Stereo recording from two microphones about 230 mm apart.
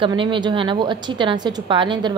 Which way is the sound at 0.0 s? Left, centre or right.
Right.